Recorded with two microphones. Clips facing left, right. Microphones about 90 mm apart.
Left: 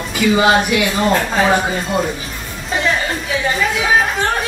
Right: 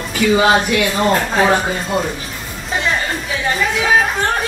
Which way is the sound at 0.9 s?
Centre (ahead or behind).